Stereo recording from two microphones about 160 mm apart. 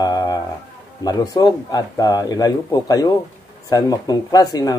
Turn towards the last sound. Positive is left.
turn(degrees=20)  # may be behind; listen again after turning